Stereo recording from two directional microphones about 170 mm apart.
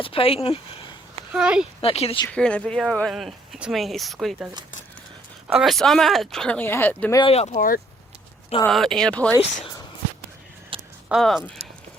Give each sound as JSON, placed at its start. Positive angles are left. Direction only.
{"t": 0.0, "sound": "speech", "side_deg": 35}
{"t": 1.3, "sound": "speech", "side_deg": -5}
{"t": 1.8, "sound": "speech", "side_deg": 35}
{"t": 2.3, "sound": "speech", "side_deg": 5}
{"t": 5.5, "sound": "speech", "side_deg": 0}
{"t": 7.2, "sound": "speech", "side_deg": 35}
{"t": 8.6, "sound": "speech", "side_deg": 0}
{"t": 10.7, "sound": "a sound", "side_deg": -30}
{"t": 11.1, "sound": "speech", "side_deg": 0}